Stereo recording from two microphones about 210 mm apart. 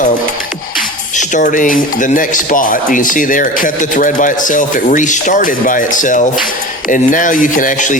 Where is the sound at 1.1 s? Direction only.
35° left (ahead or behind).